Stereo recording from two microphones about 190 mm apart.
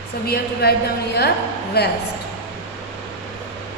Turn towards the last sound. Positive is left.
turn(degrees=60)  # may be behind; listen again after turning